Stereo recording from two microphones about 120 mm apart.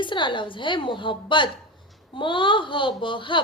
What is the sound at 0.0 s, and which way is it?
A woman's voice, 45° left (ahead or behind).